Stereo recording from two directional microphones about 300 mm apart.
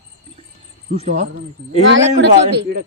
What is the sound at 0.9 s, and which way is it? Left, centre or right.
Speech, right.